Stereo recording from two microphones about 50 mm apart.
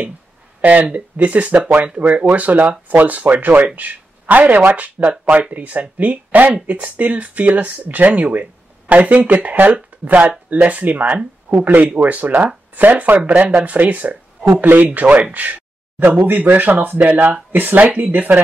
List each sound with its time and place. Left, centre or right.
0.6 s speech: right
16.1 s speech: right